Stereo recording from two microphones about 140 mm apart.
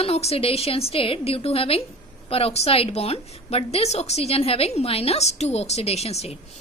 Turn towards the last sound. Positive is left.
turn(degrees=50)  # may be behind; listen again after turning